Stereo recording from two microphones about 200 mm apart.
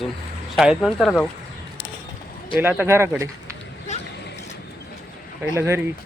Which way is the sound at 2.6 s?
10° right (ahead or behind).